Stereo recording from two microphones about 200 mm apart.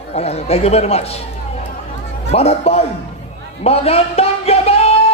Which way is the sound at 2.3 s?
30° left (ahead or behind).